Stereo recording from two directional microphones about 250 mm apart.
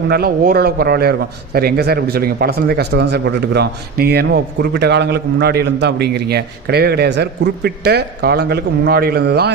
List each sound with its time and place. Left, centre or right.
0.1 s speech: right